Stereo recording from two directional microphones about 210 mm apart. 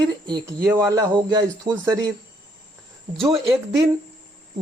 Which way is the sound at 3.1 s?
Centre (ahead or behind).